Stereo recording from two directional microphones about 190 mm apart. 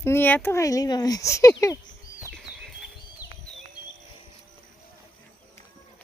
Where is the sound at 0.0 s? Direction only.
10° left (ahead or behind).